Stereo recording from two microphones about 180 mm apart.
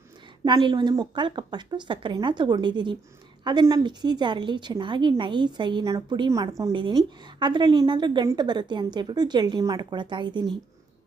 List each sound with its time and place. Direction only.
0.4 s a woman's voice: 25° right (ahead or behind)